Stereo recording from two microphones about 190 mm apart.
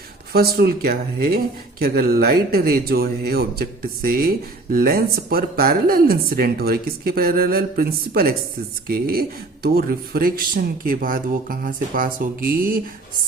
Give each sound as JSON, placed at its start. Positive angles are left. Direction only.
{"t": 0.3, "sound": "speech", "side_deg": -55}